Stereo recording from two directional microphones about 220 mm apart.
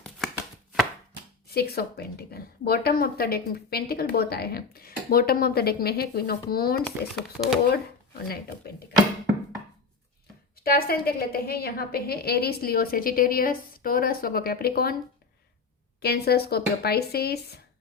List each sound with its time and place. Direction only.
0.3 s chopping: 5° right (ahead or behind)
1.5 s a woman's voice: 45° left (ahead or behind)
10.6 s a woman's voice: 45° left (ahead or behind)
16.0 s a woman's voice: 45° left (ahead or behind)